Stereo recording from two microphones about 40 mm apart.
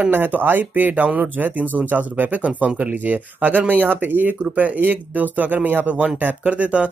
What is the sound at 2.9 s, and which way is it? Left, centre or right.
Speech, right.